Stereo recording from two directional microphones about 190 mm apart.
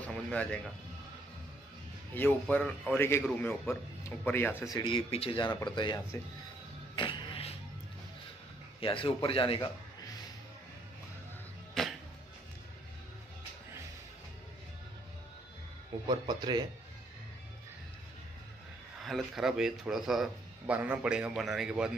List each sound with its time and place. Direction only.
0.0 s music: 5° left (ahead or behind)
2.1 s speech: 10° left (ahead or behind)
4.7 s speech: 25° left (ahead or behind)
7.0 s a sound: 25° left (ahead or behind)
8.8 s speech: 25° left (ahead or behind)
11.8 s music: centre (ahead or behind)
16.1 s speech: 25° right (ahead or behind)
19.0 s speech: centre (ahead or behind)